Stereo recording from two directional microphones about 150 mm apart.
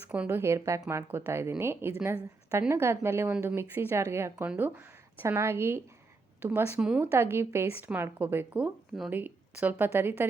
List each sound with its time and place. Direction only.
0.1 s a woman's voice: 10° right (ahead or behind)
7.0 s a woman's voice: 15° right (ahead or behind)